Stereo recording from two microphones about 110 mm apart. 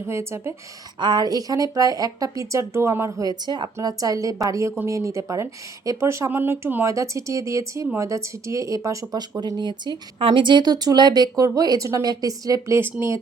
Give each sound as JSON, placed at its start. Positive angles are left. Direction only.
{"t": 0.0, "sound": "speech", "side_deg": -25}
{"t": 0.9, "sound": "speech", "side_deg": -40}
{"t": 10.2, "sound": "speech", "side_deg": -55}